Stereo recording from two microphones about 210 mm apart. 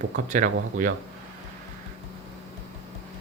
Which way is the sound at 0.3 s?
35° right (ahead or behind).